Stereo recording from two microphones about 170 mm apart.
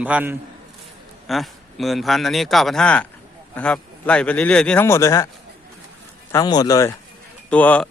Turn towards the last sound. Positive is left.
turn(degrees=10)  # may be behind; listen again after turning